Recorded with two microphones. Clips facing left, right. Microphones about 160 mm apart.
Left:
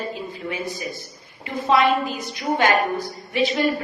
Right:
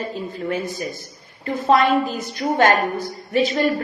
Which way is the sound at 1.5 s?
40° right (ahead or behind).